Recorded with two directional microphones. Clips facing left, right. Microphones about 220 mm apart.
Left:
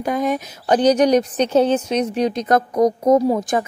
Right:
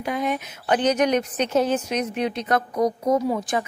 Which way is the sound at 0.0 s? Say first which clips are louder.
Left 5 dB; 40° left (ahead or behind).